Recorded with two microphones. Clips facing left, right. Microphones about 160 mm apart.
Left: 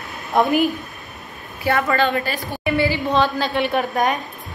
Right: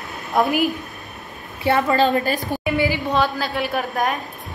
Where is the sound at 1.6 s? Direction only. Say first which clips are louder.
Right 2 dB; 25° right (ahead or behind).